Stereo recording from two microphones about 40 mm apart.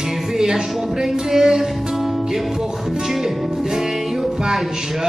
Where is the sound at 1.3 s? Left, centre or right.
Centre.